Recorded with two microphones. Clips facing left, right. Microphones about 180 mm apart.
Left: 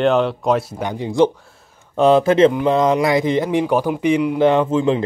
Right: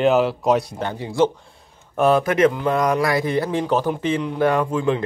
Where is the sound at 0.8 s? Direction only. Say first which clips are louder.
Left 5 dB; 20° left (ahead or behind).